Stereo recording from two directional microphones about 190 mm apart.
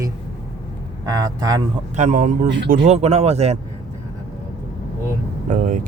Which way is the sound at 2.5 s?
65° right (ahead or behind).